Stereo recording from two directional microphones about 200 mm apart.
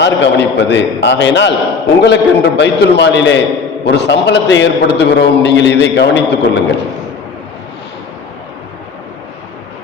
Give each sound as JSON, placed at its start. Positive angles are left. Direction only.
{"t": 0.0, "sound": "a man's voice", "side_deg": 60}